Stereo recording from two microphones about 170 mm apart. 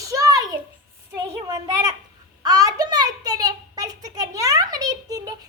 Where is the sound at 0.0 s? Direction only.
20° right (ahead or behind).